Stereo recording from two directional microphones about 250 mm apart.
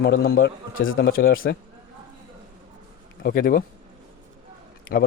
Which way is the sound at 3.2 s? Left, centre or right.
Left.